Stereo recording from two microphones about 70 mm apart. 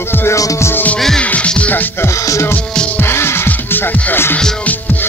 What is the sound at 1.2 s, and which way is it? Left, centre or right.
Music, centre.